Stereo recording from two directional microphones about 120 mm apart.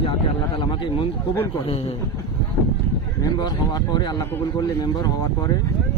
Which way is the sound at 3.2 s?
35° left (ahead or behind).